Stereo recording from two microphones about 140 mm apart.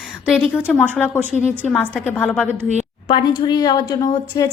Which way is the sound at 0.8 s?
10° left (ahead or behind).